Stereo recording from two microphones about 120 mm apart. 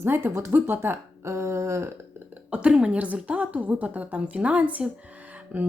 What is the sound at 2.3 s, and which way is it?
A woman's voice, 10° right (ahead or behind).